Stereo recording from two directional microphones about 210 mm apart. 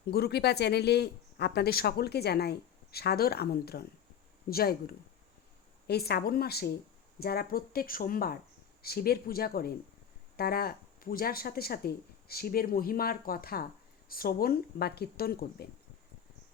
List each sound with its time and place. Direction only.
0.1 s speech: 50° left (ahead or behind)